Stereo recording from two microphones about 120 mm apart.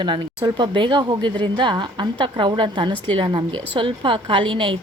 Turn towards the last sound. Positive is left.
turn(degrees=-45)  # may be behind; listen again after turning